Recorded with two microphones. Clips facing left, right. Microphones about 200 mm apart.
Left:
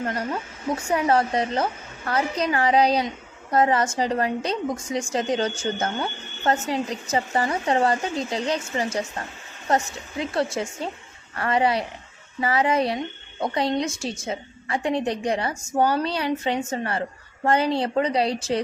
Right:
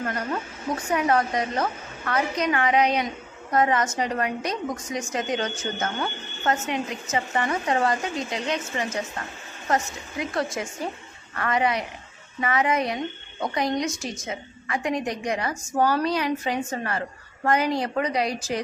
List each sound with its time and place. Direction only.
0.0 s a woman's voice: 30° left (ahead or behind)